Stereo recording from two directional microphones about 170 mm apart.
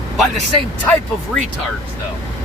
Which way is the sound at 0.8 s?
5° left (ahead or behind).